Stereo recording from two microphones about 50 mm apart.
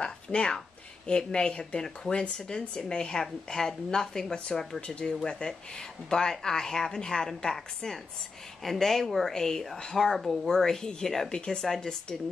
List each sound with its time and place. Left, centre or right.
0.0 s speech: centre